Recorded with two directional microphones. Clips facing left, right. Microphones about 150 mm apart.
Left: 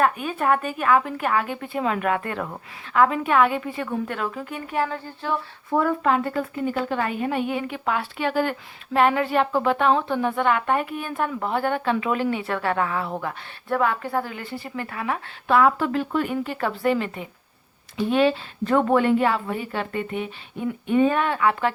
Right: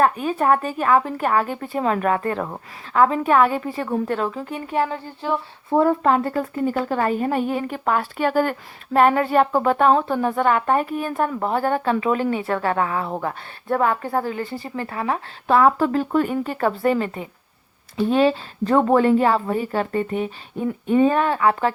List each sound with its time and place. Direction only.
0.0 s speech: 35° right (ahead or behind)